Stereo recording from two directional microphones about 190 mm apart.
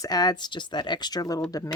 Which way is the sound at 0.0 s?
20° left (ahead or behind).